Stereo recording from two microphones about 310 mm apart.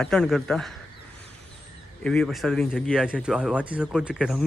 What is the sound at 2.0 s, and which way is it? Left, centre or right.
A man's voice, centre.